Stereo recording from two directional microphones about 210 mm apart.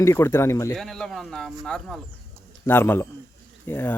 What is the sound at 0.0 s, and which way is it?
Speech, 15° left (ahead or behind).